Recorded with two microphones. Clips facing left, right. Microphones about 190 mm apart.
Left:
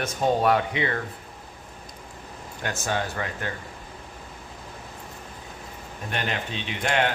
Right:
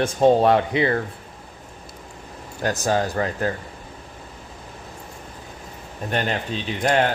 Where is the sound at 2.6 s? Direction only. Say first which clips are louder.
Right 7 dB; 35° right (ahead or behind).